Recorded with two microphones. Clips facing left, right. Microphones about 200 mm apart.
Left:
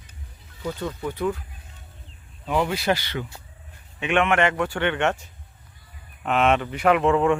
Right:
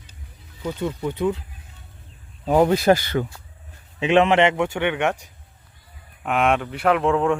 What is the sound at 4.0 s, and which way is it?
Speech, 30° right (ahead or behind).